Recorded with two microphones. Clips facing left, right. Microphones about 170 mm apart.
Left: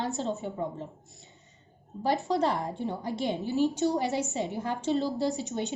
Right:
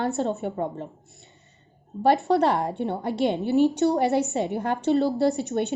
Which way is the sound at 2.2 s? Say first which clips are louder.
Right 6 dB; 65° right (ahead or behind).